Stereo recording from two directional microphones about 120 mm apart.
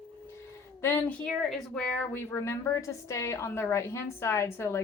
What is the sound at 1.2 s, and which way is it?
A woman's voice, 5° left (ahead or behind).